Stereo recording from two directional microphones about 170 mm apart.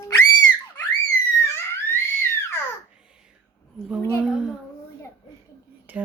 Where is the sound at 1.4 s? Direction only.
15° left (ahead or behind).